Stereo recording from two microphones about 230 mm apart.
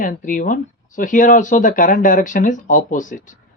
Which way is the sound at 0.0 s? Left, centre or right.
Left.